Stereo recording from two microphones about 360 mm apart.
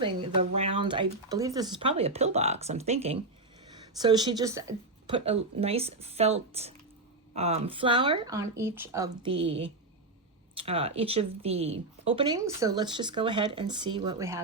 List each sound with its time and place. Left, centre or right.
0.0 s speech: centre